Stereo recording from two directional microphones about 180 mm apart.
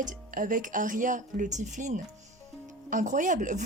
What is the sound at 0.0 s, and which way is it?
A woman's voice, 45° right (ahead or behind).